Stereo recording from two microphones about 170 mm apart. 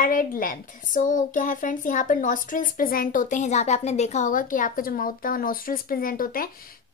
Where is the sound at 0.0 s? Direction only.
55° left (ahead or behind).